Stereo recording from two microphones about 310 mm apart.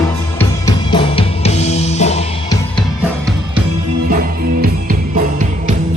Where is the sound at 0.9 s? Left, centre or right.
Centre.